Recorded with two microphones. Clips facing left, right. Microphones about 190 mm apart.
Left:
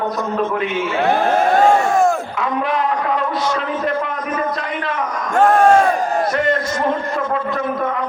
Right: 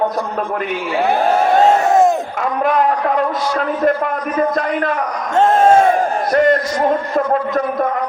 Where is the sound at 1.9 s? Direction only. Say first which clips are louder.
Right 3 dB; 20° right (ahead or behind).